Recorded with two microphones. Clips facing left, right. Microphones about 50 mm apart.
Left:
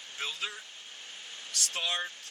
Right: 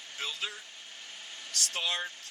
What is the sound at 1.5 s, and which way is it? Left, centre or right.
Speech, left.